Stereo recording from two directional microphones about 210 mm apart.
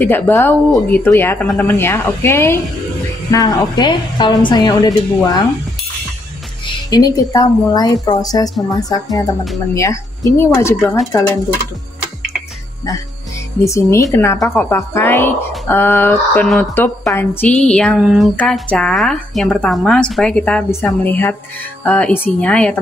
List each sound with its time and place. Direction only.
0.0 s a woman's voice: 10° left (ahead or behind)
6.9 s a woman's voice: 20° left (ahead or behind)
13.7 s a woman's voice: 15° left (ahead or behind)